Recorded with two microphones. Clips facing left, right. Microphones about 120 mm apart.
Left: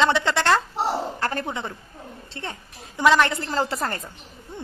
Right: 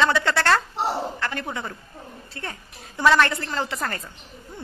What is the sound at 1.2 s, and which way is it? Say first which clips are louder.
Speech: left 3 dB; 40° left (ahead or behind).